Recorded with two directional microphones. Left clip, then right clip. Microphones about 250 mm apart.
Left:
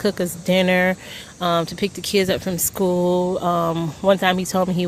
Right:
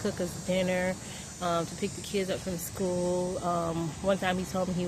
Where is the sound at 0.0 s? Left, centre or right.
Left.